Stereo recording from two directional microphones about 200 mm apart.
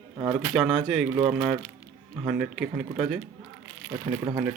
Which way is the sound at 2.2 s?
5° right (ahead or behind).